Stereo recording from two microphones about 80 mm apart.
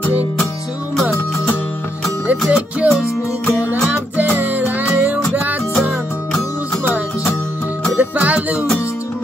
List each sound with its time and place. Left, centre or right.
2.4 s music: centre
4.2 s music: right
8.0 s music: centre